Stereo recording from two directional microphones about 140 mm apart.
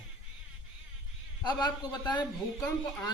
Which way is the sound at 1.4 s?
30° left (ahead or behind).